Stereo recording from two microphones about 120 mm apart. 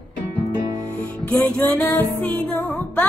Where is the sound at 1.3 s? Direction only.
10° left (ahead or behind).